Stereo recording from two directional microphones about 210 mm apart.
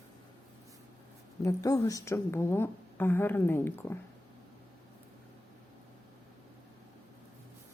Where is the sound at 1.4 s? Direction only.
15° left (ahead or behind).